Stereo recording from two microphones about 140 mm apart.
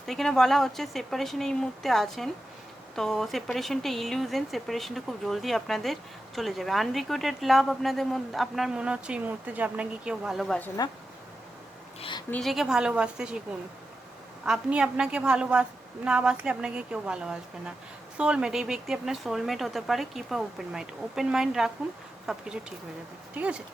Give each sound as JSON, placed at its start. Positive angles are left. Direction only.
{"t": 0.0, "sound": "speech", "side_deg": 5}
{"t": 10.8, "sound": "speech", "side_deg": 30}
{"t": 11.9, "sound": "a woman's voice", "side_deg": 40}
{"t": 12.3, "sound": "speech", "side_deg": 0}
{"t": 14.4, "sound": "speech", "side_deg": -5}